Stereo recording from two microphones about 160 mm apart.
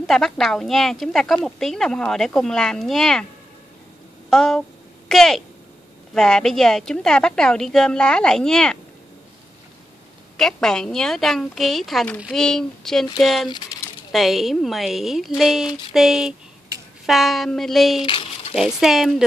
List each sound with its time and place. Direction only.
0.0 s a woman's voice: centre (ahead or behind)
4.3 s a sound: 5° left (ahead or behind)
6.1 s a woman's voice: 5° left (ahead or behind)
10.3 s a woman's voice: 5° left (ahead or behind)